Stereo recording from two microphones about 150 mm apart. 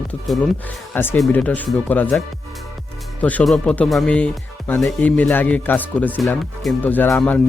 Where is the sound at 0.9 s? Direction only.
15° left (ahead or behind).